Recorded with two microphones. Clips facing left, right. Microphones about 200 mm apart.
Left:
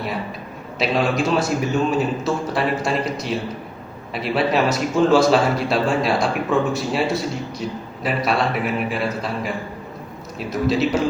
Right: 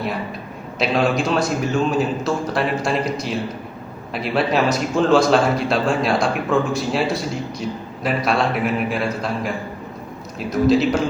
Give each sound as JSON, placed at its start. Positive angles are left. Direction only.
{"t": 0.8, "sound": "a man's voice", "side_deg": 5}
{"t": 10.5, "sound": "a man's voice", "side_deg": 0}